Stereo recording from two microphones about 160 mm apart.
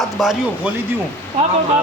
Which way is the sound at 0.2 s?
Centre (ahead or behind).